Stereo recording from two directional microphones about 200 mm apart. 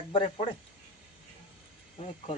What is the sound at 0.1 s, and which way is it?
Speech, 25° left (ahead or behind).